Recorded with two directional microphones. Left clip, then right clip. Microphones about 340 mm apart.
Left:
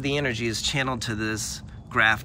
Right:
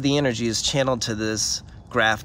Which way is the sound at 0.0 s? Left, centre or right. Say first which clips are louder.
Right 4 dB; centre.